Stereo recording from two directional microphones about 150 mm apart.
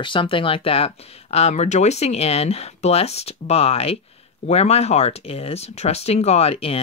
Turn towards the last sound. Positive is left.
turn(degrees=40)  # may be behind; listen again after turning